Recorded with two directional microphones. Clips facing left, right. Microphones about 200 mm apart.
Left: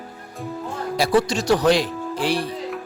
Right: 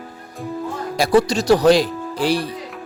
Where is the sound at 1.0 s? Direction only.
45° right (ahead or behind).